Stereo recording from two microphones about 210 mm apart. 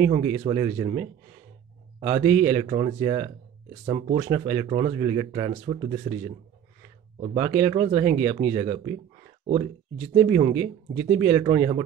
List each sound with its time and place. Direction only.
0.0 s speech: 20° right (ahead or behind)
7.3 s speech: 15° right (ahead or behind)
10.1 s speech: 20° right (ahead or behind)